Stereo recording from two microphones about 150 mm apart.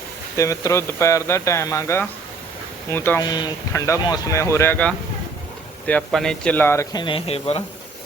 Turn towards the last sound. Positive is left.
turn(degrees=40)  # may be behind; listen again after turning